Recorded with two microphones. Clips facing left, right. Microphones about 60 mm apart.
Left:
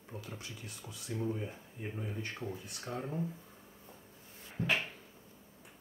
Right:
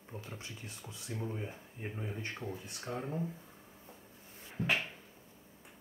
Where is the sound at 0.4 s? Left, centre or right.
Right.